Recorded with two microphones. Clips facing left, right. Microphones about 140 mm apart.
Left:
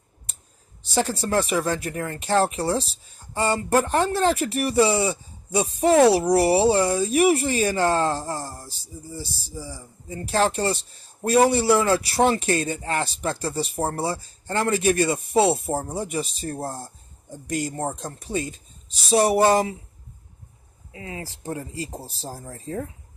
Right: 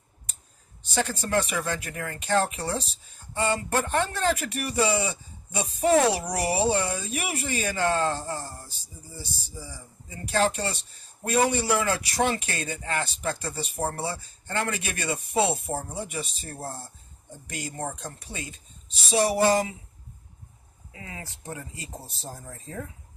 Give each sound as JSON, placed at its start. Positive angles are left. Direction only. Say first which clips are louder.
{"t": 0.9, "sound": "speech", "louder": "left 3 dB", "side_deg": 35}
{"t": 20.9, "sound": "speech", "louder": "left 6 dB", "side_deg": 30}